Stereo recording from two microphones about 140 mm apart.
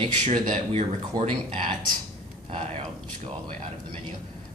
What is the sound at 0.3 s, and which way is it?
Speech, 50° right (ahead or behind).